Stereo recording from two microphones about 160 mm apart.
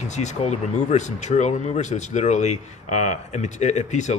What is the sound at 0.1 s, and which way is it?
Speech, 45° left (ahead or behind).